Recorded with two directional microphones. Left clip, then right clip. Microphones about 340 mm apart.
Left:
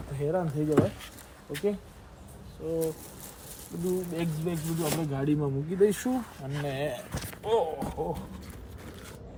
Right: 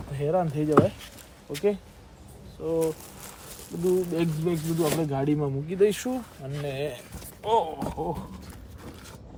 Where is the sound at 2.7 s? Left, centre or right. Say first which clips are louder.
Right 4 dB; centre.